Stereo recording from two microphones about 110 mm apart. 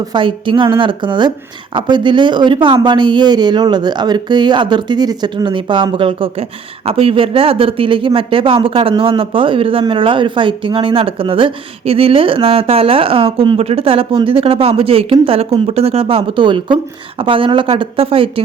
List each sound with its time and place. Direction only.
0.0 s speech: 45° right (ahead or behind)